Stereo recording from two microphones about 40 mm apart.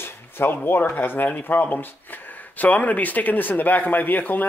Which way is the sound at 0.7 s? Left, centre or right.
Left.